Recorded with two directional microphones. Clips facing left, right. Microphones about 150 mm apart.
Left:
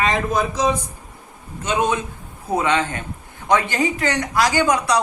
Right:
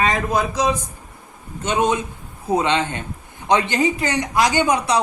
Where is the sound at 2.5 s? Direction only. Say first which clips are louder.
Even; 25° right (ahead or behind).